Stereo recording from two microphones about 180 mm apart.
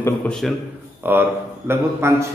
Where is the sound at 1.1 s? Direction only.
10° right (ahead or behind).